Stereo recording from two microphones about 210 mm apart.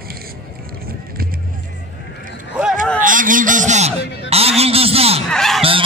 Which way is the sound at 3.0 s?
40° right (ahead or behind).